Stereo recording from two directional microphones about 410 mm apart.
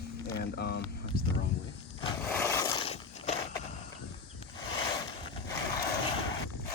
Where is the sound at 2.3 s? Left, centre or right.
Centre.